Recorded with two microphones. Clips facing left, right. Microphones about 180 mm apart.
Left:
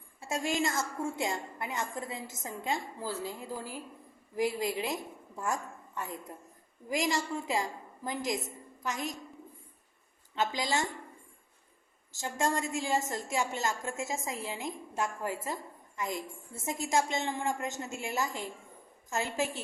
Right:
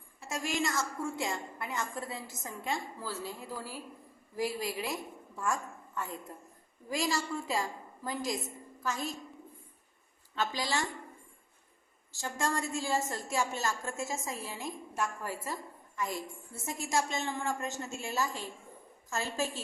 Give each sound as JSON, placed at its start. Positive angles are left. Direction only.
{"t": 0.3, "sound": "a woman's voice", "side_deg": 25}
{"t": 10.3, "sound": "a woman's voice", "side_deg": 20}
{"t": 12.2, "sound": "a woman's voice", "side_deg": 20}